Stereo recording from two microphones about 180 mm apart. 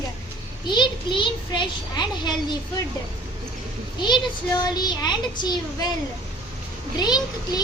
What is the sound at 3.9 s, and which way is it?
A child's voice, 25° left (ahead or behind).